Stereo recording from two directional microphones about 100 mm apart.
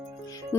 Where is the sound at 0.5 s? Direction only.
25° left (ahead or behind).